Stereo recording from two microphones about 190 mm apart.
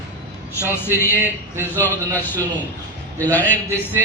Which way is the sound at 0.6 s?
15° left (ahead or behind).